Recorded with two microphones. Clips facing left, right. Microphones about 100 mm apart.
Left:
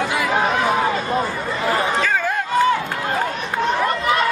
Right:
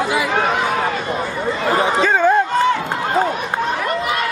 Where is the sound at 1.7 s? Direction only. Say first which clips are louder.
Right 4 dB; 25° right (ahead or behind).